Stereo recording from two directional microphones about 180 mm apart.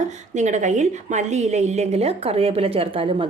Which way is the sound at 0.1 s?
40° right (ahead or behind).